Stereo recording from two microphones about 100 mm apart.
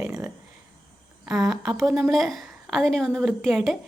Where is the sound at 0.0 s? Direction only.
30° right (ahead or behind).